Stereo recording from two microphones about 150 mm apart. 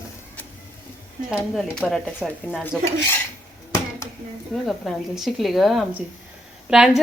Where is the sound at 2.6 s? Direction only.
15° left (ahead or behind).